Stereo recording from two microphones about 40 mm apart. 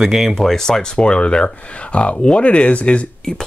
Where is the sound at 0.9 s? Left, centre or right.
Left.